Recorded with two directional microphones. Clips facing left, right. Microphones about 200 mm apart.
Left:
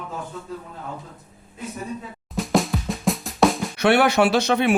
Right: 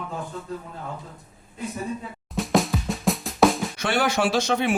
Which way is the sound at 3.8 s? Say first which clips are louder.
Left 6 dB; 65° left (ahead or behind).